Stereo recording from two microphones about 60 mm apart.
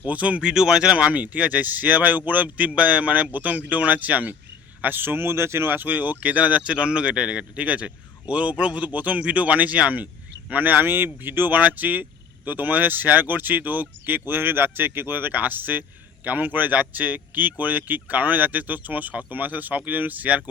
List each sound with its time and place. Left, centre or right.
0.0 s speech: right
0.4 s speech: centre
0.9 s speech: right